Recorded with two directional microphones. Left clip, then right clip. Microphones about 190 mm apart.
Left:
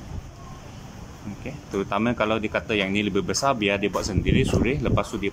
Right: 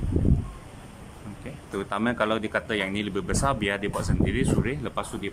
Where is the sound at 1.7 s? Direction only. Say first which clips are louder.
Left 2 dB; 5° left (ahead or behind).